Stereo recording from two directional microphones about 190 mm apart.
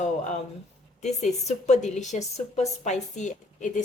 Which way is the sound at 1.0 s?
35° left (ahead or behind).